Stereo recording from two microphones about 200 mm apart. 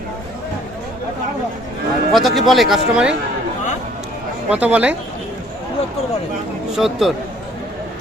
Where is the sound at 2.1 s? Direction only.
Centre (ahead or behind).